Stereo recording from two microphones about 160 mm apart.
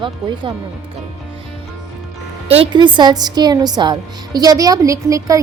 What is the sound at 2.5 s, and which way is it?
A woman's voice, 35° right (ahead or behind).